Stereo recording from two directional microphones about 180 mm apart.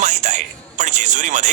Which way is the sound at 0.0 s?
40° right (ahead or behind).